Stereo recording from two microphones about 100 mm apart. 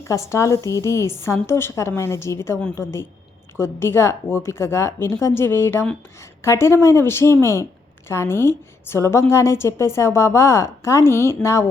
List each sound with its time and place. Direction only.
0.1 s speech: 30° left (ahead or behind)